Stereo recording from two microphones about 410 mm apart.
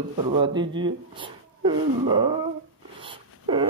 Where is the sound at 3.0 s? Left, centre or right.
Centre.